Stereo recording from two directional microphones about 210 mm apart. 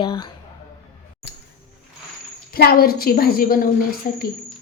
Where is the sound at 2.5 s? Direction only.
45° left (ahead or behind).